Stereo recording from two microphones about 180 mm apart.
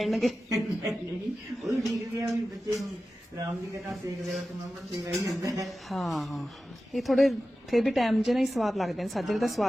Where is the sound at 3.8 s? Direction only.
Centre (ahead or behind).